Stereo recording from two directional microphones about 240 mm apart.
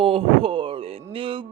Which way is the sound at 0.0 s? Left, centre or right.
Right.